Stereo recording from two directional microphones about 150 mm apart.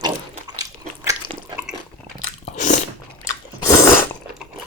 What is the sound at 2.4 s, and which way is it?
Biting, 55° left (ahead or behind).